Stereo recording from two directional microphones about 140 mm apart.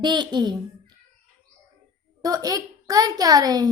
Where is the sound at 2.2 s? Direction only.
25° right (ahead or behind).